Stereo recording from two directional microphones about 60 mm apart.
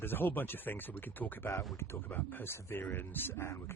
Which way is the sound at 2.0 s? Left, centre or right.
Left.